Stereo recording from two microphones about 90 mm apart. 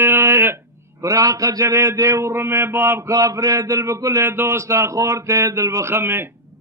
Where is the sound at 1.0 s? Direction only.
40° right (ahead or behind).